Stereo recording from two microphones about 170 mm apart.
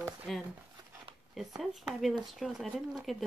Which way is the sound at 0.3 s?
Centre (ahead or behind).